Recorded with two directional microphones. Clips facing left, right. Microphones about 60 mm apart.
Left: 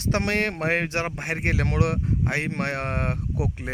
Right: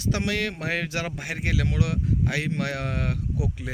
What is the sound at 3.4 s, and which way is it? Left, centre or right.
Speech, left.